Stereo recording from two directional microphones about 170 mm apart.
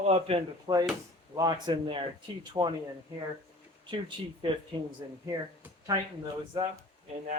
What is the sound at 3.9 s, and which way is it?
Speech, 30° right (ahead or behind).